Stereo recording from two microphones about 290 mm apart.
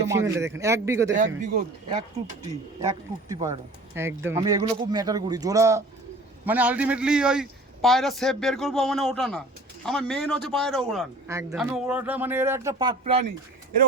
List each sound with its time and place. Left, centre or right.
0.1 s speech: centre
1.4 s a man's voice: right; by 11.1 s centre
11.3 s speech: centre